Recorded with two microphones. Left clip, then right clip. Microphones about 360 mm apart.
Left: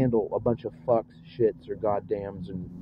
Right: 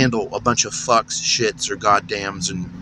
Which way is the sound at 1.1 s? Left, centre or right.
Left.